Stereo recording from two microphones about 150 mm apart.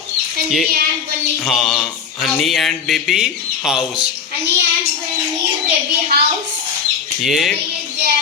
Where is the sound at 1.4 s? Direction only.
Centre (ahead or behind).